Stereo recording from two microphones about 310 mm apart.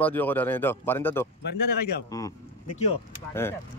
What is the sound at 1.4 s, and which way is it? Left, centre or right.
Speech, left.